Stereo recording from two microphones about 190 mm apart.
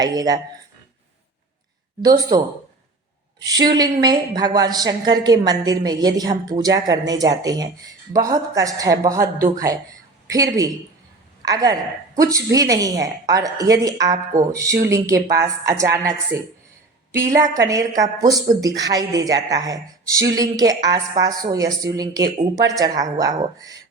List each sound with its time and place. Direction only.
0.0 s a woman's voice: 20° right (ahead or behind)
2.0 s a woman's voice: 20° right (ahead or behind)
3.4 s a woman's voice: 20° right (ahead or behind)